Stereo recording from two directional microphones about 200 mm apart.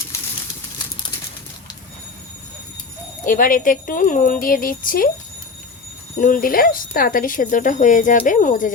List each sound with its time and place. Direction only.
0.1 s a sound: 15° left (ahead or behind)
3.2 s speech: 40° left (ahead or behind)
6.1 s speech: 45° left (ahead or behind)